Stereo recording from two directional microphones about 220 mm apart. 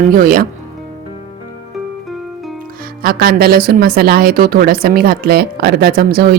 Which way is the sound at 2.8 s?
40° right (ahead or behind).